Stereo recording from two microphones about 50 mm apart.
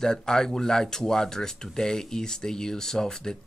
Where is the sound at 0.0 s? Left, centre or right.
Centre.